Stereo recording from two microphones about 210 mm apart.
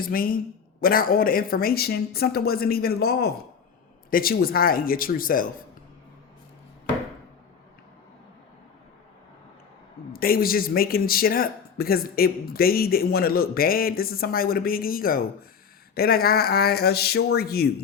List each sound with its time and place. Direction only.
0.0 s speech: 45° left (ahead or behind)
10.1 s speech: 45° left (ahead or behind)